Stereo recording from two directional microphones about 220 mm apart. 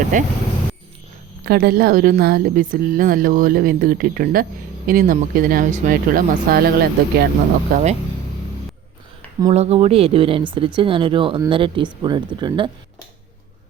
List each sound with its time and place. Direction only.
0.1 s a woman's voice: 35° right (ahead or behind)
1.5 s a woman's voice: 45° right (ahead or behind)
9.5 s speech: 30° right (ahead or behind)